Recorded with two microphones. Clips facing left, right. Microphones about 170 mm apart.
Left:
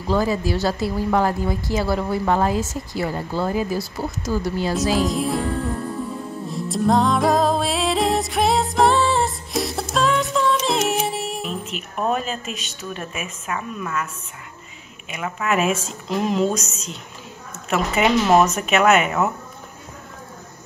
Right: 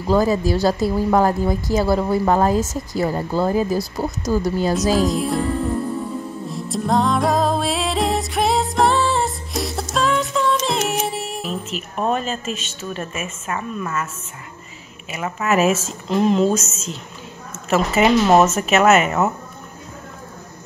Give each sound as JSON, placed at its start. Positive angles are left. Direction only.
{"t": 0.1, "sound": "speech", "side_deg": -40}
{"t": 4.9, "sound": "a woman's voice", "side_deg": 0}
{"t": 6.5, "sound": "music", "side_deg": 0}
{"t": 12.1, "sound": "a woman's voice", "side_deg": 0}
{"t": 15.0, "sound": "a woman's voice", "side_deg": -5}